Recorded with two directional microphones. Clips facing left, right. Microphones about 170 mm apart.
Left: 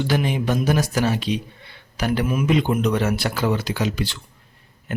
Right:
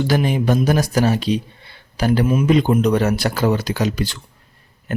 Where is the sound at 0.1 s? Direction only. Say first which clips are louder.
Right 4 dB; 40° right (ahead or behind).